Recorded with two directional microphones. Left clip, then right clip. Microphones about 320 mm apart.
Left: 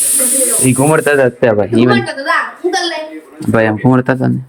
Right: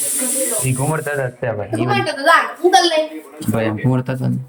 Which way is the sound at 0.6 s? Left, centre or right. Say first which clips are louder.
Left 11 dB; left.